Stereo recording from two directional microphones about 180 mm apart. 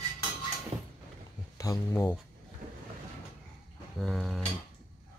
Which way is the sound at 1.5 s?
15° left (ahead or behind).